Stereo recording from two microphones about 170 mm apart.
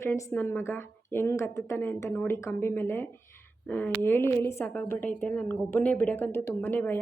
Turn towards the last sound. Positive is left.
turn(degrees=10)  # may be behind; listen again after turning